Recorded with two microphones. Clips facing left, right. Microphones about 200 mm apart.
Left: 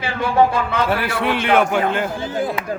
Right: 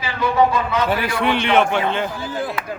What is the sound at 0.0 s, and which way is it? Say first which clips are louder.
Speech: left 1 dB; 55° left (ahead or behind).